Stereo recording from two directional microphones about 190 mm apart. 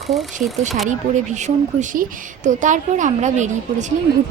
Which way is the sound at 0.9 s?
40° right (ahead or behind).